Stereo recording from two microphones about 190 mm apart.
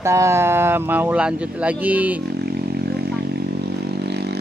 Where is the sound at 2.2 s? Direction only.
60° right (ahead or behind).